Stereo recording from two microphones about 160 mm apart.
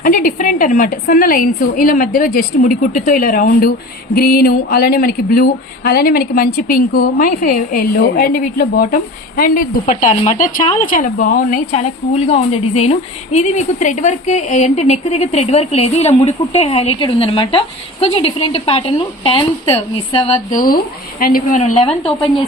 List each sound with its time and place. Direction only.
0.0 s a woman's voice: 55° left (ahead or behind); by 19.5 s 35° left (ahead or behind)
20.6 s a woman's voice: 65° left (ahead or behind)
21.6 s a woman's voice: 45° left (ahead or behind)